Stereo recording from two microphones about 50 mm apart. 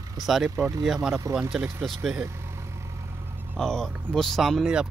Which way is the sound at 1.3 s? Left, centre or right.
Right.